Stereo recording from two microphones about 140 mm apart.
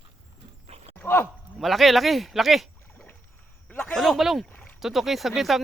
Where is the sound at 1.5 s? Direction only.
Centre (ahead or behind).